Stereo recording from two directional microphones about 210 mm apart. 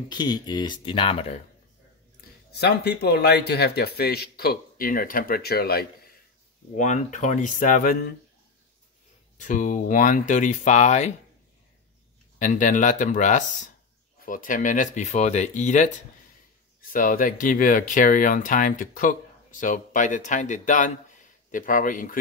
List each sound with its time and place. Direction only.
0.1 s speech: 20° left (ahead or behind)
2.5 s speech: 50° left (ahead or behind)
6.7 s speech: 35° left (ahead or behind)
9.4 s speech: 35° left (ahead or behind)
12.4 s speech: 40° left (ahead or behind)